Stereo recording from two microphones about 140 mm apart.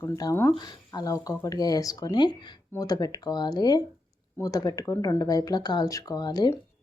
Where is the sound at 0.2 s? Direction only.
20° left (ahead or behind).